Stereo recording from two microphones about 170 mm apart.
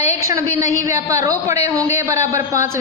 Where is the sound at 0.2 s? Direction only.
15° right (ahead or behind).